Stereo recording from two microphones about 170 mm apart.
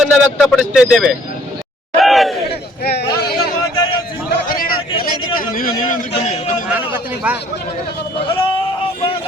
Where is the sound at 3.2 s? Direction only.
65° left (ahead or behind); by 6.1 s 50° left (ahead or behind).